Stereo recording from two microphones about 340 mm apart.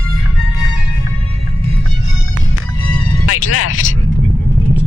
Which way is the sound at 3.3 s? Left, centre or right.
Left.